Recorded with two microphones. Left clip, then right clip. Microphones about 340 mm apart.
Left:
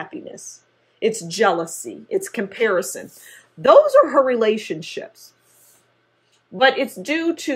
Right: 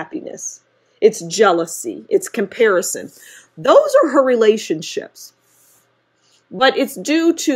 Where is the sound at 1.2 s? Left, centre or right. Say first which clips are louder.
Right 4 dB; right.